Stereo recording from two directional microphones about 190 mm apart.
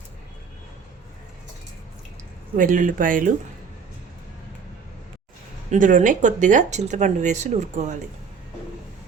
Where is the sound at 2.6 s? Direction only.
45° right (ahead or behind).